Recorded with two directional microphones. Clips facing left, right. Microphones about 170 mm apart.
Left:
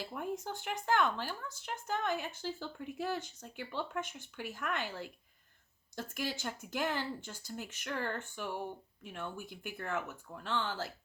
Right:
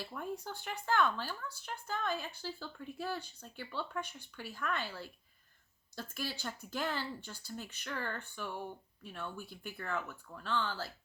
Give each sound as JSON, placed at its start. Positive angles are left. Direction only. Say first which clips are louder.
{"t": 0.0, "sound": "speech", "louder": "left 2 dB", "side_deg": 15}